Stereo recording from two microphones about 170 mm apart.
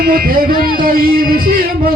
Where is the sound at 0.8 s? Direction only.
60° right (ahead or behind).